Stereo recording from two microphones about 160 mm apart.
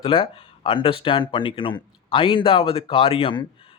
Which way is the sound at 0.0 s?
35° left (ahead or behind).